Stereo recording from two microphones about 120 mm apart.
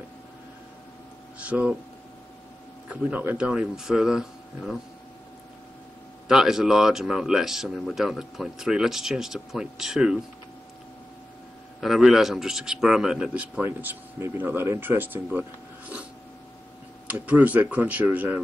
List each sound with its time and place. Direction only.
1.4 s speech: 10° right (ahead or behind)
2.9 s speech: 15° right (ahead or behind)
6.2 s speech: 5° right (ahead or behind)
11.8 s speech: centre (ahead or behind)
13.7 s speech: 20° right (ahead or behind)
17.1 s speech: 10° right (ahead or behind)